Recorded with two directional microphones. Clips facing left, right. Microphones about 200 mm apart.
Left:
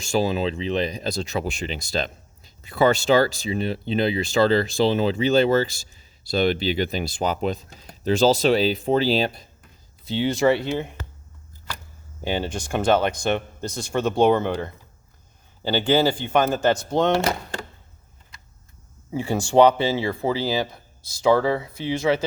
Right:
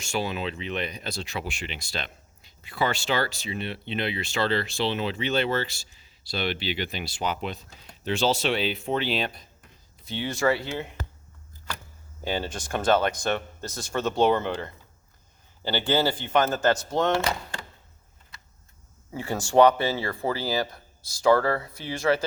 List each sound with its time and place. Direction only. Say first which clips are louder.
0.0 s speech: left 7 dB; 35° left (ahead or behind)
12.2 s speech: left 4 dB; 15° left (ahead or behind)
19.1 s speech: left 3 dB; 15° left (ahead or behind)